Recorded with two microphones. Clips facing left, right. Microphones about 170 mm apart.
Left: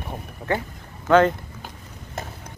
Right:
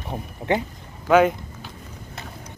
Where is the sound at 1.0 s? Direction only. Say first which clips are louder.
Even; 10° right (ahead or behind).